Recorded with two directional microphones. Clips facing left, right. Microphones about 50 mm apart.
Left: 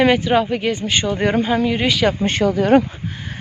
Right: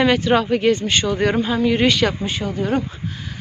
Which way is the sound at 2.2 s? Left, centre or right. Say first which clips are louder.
Left 7 dB; left.